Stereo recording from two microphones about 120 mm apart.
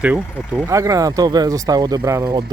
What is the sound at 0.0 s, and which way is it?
Speech, 10° right (ahead or behind).